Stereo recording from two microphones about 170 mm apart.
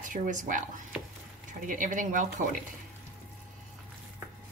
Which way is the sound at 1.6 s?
50° right (ahead or behind).